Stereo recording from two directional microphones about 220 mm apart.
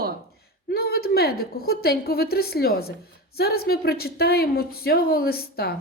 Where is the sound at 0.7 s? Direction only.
45° left (ahead or behind).